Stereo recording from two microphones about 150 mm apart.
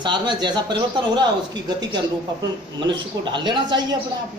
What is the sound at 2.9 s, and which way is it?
A man's voice, 30° right (ahead or behind).